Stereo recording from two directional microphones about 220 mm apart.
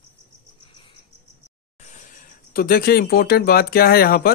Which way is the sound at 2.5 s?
40° left (ahead or behind).